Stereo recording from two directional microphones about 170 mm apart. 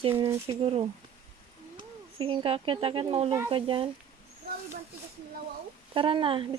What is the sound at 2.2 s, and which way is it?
Speech, 30° right (ahead or behind).